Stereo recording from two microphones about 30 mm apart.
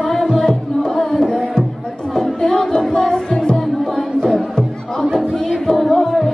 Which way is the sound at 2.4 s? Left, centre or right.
Left.